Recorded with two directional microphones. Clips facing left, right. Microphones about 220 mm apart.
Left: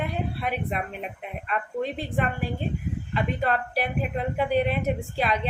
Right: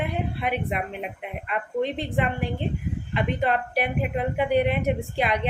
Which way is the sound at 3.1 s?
20° right (ahead or behind).